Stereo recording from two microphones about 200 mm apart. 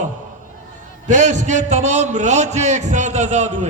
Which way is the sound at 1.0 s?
40° right (ahead or behind).